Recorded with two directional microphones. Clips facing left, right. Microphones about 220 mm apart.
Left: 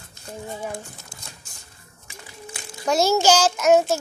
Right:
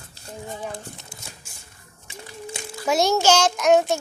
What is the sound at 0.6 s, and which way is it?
Speech, 10° left (ahead or behind).